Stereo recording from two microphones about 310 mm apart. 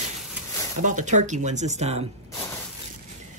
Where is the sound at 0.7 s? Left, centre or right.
Right.